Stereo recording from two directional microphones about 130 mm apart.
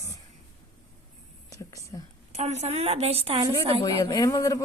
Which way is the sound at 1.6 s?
25° left (ahead or behind).